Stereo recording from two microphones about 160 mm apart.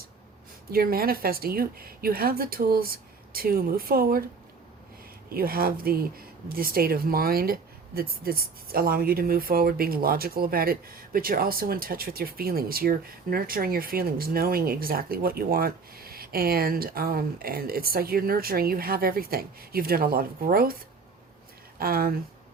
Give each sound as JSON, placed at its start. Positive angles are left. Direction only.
{"t": 0.7, "sound": "speech", "side_deg": -70}
{"t": 5.3, "sound": "speech", "side_deg": -70}
{"t": 21.8, "sound": "speech", "side_deg": -70}